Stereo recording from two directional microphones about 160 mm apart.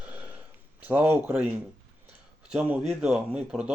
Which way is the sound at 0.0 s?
10° right (ahead or behind).